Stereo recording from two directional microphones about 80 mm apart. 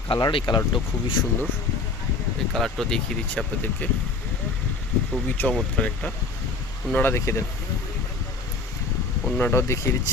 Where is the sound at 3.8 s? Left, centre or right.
Left.